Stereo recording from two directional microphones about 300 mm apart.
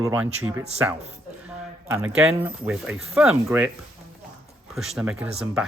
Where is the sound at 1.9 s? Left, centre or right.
Centre.